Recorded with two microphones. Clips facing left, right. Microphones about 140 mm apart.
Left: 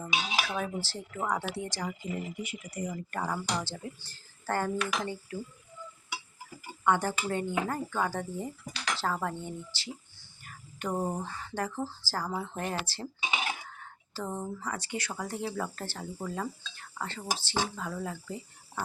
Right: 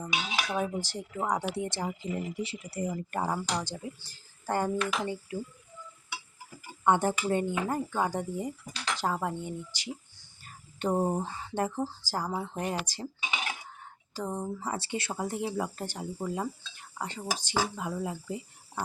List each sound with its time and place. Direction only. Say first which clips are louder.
0.4 s speech: right 3 dB; 15° right (ahead or behind)
6.8 s speech: right 2 dB; 25° right (ahead or behind)
10.4 s speech: right 5 dB; 30° right (ahead or behind)
13.2 s cutlery: left 3 dB; 15° left (ahead or behind)
14.1 s speech: right 2 dB; 15° right (ahead or behind)
14.6 s speech: right 2 dB; 25° right (ahead or behind)